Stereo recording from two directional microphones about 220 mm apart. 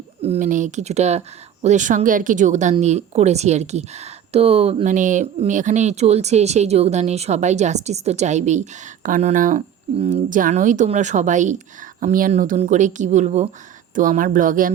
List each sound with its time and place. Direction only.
0.2 s speech: 30° right (ahead or behind)